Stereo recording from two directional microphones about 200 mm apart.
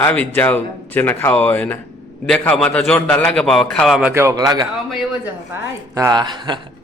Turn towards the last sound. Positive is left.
turn(degrees=-20)  # may be behind; listen again after turning